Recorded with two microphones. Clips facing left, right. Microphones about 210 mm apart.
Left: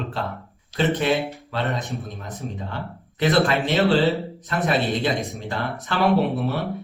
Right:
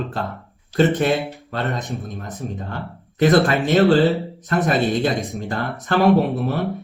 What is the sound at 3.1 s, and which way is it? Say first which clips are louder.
Speech: right 4 dB; 50° right (ahead or behind).